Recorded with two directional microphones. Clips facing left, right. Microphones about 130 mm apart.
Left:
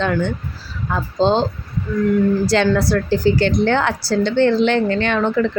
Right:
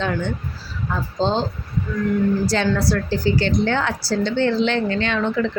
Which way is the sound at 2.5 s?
65° left (ahead or behind).